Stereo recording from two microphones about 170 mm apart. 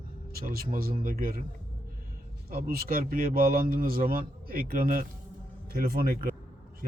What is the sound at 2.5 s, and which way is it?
A man's voice, 60° right (ahead or behind).